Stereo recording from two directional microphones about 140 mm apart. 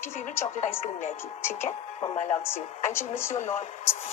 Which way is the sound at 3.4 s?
60° left (ahead or behind).